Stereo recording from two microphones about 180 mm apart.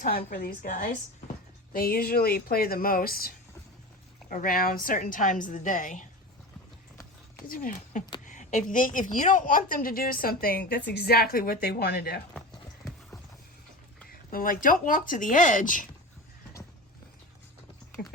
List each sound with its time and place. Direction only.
0.0 s a woman's voice: 50° left (ahead or behind)
7.4 s a woman's voice: 50° left (ahead or behind)
8.2 s a sound: 45° left (ahead or behind)
8.7 s a woman's voice: 45° left (ahead or behind)
14.1 s a woman's voice: 50° left (ahead or behind)
18.0 s speech: 60° left (ahead or behind)